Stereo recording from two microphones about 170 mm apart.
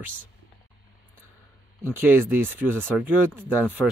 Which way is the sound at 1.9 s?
15° right (ahead or behind).